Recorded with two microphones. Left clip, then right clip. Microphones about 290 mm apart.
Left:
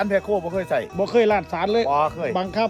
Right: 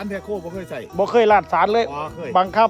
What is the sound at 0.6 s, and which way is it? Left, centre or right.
Speech, centre.